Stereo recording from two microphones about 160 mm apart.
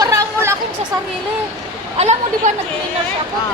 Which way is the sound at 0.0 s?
20° right (ahead or behind).